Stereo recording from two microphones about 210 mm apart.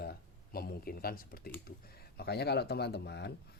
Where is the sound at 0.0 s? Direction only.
45° left (ahead or behind).